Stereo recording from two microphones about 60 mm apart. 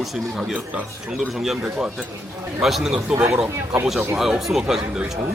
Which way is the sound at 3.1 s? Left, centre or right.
Right.